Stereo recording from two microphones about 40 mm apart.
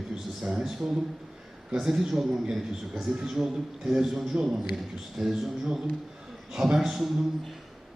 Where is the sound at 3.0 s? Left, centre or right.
Centre.